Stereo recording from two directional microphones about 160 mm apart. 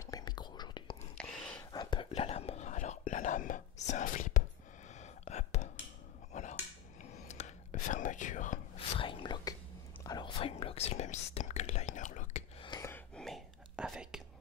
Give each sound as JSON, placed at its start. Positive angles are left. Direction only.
{"t": 0.0, "sound": "whispering", "side_deg": 25}
{"t": 1.1, "sound": "whispering", "side_deg": 5}
{"t": 1.7, "sound": "whispering", "side_deg": 30}
{"t": 4.9, "sound": "a sound", "side_deg": 45}
{"t": 6.3, "sound": "dishes", "side_deg": 50}
{"t": 7.0, "sound": "whispering", "side_deg": 45}
{"t": 8.7, "sound": "whispering", "side_deg": 35}
{"t": 12.8, "sound": "a sound", "side_deg": 15}
{"t": 13.2, "sound": "whispering", "side_deg": 0}